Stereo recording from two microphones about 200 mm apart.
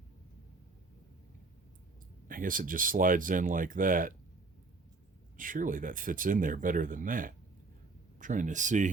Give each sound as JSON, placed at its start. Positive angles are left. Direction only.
{"t": 2.2, "sound": "speech", "side_deg": -45}
{"t": 5.4, "sound": "speech", "side_deg": -40}